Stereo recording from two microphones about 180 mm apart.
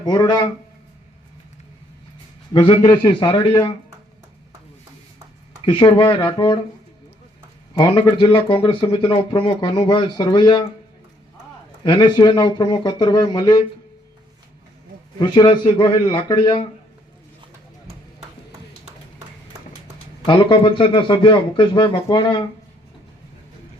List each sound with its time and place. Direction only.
0.0 s speech: 25° left (ahead or behind)
2.5 s a man's voice: 25° left (ahead or behind)
5.6 s speech: 25° left (ahead or behind)
7.7 s speech: 25° left (ahead or behind)
11.8 s speech: 25° left (ahead or behind)
15.2 s speech: 25° left (ahead or behind)
20.2 s speech: 30° left (ahead or behind)